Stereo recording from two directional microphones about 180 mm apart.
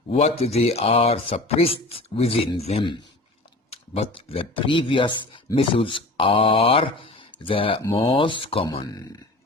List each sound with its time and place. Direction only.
0.1 s speech: 35° left (ahead or behind)